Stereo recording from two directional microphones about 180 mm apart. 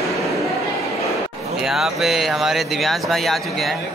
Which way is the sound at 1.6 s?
Centre (ahead or behind).